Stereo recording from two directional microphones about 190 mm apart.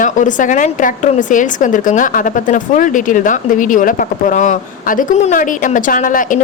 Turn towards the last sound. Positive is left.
turn(degrees=45)  # may be behind; listen again after turning